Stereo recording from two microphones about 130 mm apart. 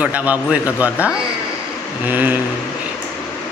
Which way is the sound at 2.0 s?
15° right (ahead or behind).